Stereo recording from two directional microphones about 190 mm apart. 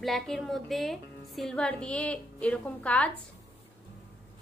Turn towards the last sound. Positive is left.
turn(degrees=5)  # may be behind; listen again after turning